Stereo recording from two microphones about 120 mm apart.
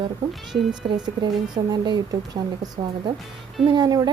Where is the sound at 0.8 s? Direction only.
40° right (ahead or behind).